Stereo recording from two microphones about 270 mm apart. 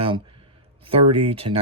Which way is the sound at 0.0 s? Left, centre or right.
Centre.